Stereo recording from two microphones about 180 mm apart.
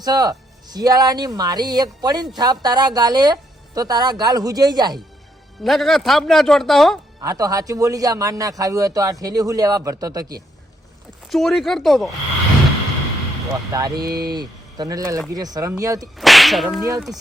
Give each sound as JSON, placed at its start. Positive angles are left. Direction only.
{"t": 0.0, "sound": "a man's voice", "side_deg": -20}
{"t": 5.6, "sound": "speech", "side_deg": 0}
{"t": 7.2, "sound": "a man's voice", "side_deg": -20}
{"t": 11.3, "sound": "speech", "side_deg": 0}
{"t": 13.5, "sound": "a man's voice", "side_deg": -20}
{"t": 14.1, "sound": "speech", "side_deg": -60}
{"t": 14.3, "sound": "a man's voice", "side_deg": -20}
{"t": 16.1, "sound": "speech", "side_deg": 0}